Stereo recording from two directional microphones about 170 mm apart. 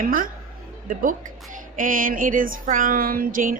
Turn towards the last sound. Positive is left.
turn(degrees=-55)  # may be behind; listen again after turning